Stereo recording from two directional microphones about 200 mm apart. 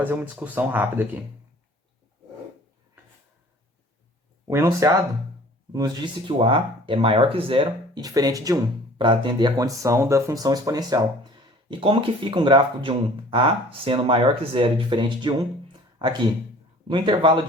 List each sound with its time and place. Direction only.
0.0 s speech: 10° right (ahead or behind)
4.4 s speech: 15° right (ahead or behind)